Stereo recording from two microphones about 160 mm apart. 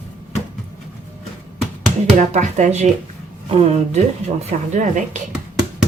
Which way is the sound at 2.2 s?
45° right (ahead or behind).